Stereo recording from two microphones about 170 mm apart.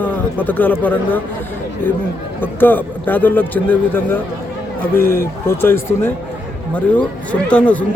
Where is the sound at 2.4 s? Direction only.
10° left (ahead or behind).